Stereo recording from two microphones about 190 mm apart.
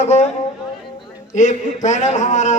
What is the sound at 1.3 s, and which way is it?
A man's voice, 40° left (ahead or behind).